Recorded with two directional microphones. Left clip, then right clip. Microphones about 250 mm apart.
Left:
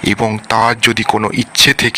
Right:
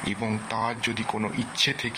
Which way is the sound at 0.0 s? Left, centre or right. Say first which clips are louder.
Left 15 dB; left.